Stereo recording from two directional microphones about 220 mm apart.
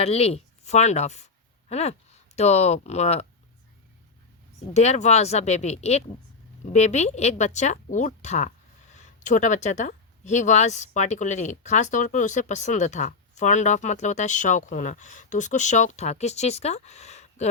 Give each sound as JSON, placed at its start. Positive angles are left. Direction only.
{"t": 0.0, "sound": "speech", "side_deg": 25}
{"t": 4.7, "sound": "a woman's voice", "side_deg": 30}